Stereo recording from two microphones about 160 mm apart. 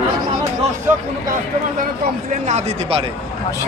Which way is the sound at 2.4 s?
45° right (ahead or behind).